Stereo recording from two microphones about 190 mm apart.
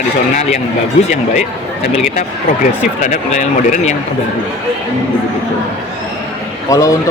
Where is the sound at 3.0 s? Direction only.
40° left (ahead or behind).